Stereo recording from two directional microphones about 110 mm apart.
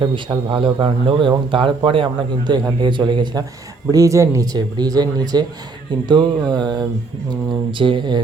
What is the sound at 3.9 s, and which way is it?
A man's voice, 30° right (ahead or behind).